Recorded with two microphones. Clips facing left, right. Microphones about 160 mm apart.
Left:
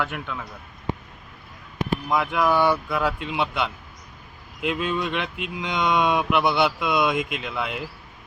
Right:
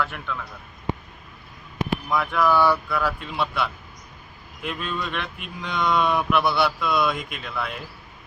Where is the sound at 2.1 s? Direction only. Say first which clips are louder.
Even; 15° left (ahead or behind).